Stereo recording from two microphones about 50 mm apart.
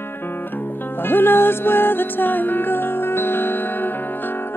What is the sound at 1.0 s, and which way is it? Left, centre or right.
Music, left.